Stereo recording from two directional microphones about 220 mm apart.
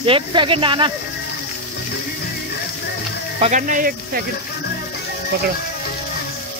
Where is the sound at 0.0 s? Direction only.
20° right (ahead or behind).